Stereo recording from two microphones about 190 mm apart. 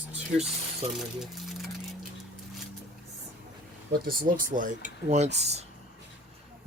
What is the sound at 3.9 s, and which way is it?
Speech, 50° right (ahead or behind).